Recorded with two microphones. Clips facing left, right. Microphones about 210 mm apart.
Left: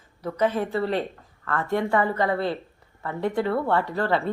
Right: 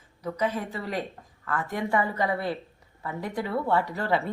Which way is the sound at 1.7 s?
55° left (ahead or behind).